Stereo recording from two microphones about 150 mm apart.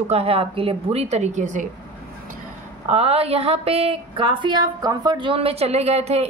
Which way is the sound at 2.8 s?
45° right (ahead or behind).